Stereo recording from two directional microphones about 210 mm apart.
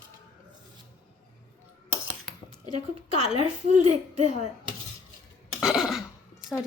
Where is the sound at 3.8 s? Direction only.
35° right (ahead or behind).